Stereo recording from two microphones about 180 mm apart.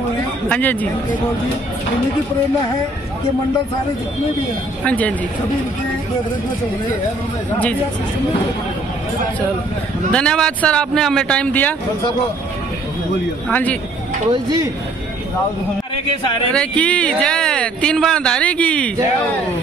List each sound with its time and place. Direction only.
0.5 s speech: 10° left (ahead or behind)
4.8 s speech: 10° left (ahead or behind)
10.1 s speech: 5° left (ahead or behind)
13.5 s speech: 10° left (ahead or behind)
14.3 s speech: 20° right (ahead or behind)
16.5 s speech: 5° left (ahead or behind)